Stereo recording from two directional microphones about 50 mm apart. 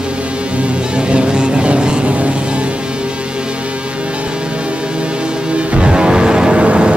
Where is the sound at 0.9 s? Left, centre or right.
Centre.